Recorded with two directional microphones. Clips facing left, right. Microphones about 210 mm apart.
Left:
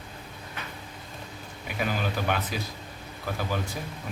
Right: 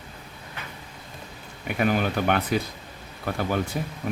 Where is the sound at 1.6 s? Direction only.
60° right (ahead or behind).